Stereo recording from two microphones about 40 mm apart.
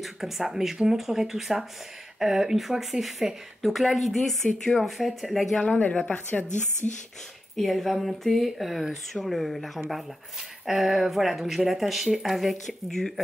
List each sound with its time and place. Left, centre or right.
0.0 s speech: centre
5.8 s speech: left
7.5 s speech: centre
10.7 s speech: centre